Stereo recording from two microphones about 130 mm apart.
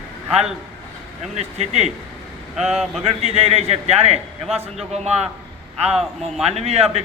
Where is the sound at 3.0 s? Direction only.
50° right (ahead or behind).